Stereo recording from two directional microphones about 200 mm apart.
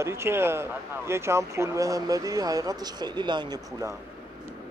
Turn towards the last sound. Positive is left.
turn(degrees=-20)  # may be behind; listen again after turning